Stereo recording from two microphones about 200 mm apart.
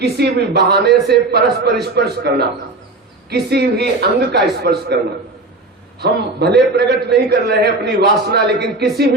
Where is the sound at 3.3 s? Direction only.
55° right (ahead or behind).